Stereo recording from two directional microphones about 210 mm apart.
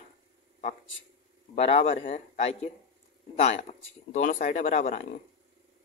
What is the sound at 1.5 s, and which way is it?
Speech, 30° left (ahead or behind).